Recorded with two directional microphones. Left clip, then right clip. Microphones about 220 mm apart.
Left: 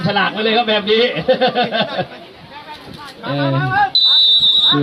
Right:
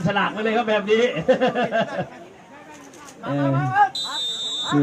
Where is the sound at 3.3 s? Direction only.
30° right (ahead or behind).